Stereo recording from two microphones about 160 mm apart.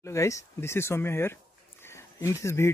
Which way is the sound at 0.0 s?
20° left (ahead or behind).